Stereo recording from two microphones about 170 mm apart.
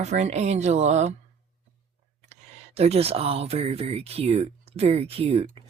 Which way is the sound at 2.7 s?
40° right (ahead or behind).